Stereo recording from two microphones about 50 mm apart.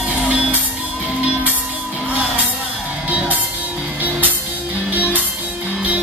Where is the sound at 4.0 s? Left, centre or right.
Right.